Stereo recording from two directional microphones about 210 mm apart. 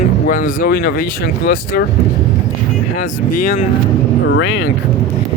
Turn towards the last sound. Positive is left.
turn(degrees=60)  # may be behind; listen again after turning